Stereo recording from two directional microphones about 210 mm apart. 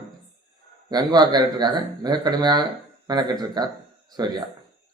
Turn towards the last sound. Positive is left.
turn(degrees=-20)  # may be behind; listen again after turning